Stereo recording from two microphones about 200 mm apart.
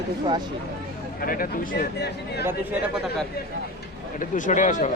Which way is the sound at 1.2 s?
45° left (ahead or behind).